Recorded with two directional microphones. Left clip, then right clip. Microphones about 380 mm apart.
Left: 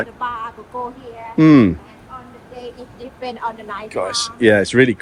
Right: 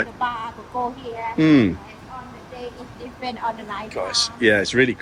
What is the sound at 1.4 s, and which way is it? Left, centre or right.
Speech, centre.